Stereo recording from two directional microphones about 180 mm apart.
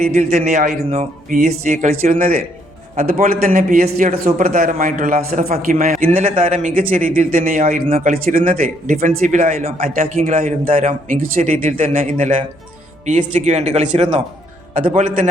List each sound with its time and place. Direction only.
0.0 s a man's voice: 40° right (ahead or behind)
7.9 s speech: 35° right (ahead or behind)
8.1 s a man's voice: 50° right (ahead or behind)
9.6 s a man's voice: 35° right (ahead or behind)